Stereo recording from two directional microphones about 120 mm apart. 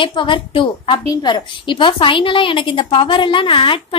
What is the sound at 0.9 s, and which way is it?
A woman's voice, 35° left (ahead or behind).